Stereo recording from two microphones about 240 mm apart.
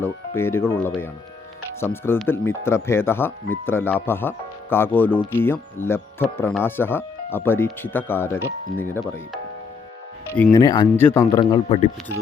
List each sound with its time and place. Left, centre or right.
0.0 s speech: centre
10.3 s speech: centre